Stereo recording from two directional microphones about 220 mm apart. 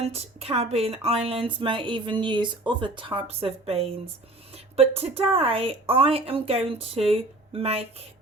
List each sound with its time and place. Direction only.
0.0 s speech: 25° right (ahead or behind)